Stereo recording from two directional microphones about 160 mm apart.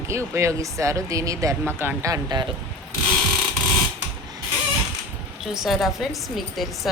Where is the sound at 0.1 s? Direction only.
15° right (ahead or behind).